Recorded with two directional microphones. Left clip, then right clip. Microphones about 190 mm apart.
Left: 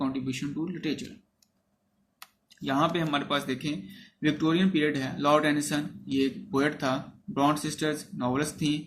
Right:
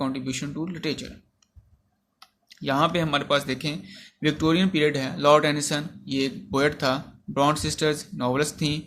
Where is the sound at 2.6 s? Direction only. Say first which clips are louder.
Right 4 dB; 55° right (ahead or behind).